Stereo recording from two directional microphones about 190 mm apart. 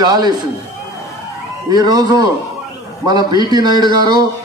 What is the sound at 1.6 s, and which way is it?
Speech, 20° right (ahead or behind).